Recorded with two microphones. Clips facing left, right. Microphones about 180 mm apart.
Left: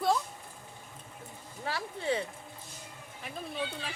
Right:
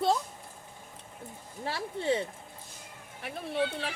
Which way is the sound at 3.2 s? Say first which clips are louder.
Right 6 dB; 75° right (ahead or behind).